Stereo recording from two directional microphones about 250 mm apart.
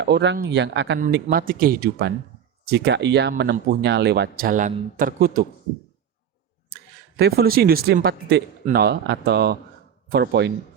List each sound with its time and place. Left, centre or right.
0.0 s speech: right
0.9 s speech: right
7.2 s speech: right